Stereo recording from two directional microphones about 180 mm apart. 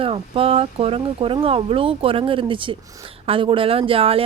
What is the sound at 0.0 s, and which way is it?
Speech, 30° right (ahead or behind).